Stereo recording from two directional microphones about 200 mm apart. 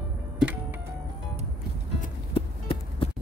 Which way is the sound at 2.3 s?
25° left (ahead or behind).